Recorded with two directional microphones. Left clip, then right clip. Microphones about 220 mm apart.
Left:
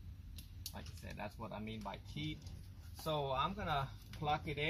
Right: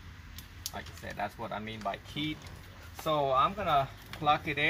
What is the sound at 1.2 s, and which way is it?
Speech, 25° right (ahead or behind).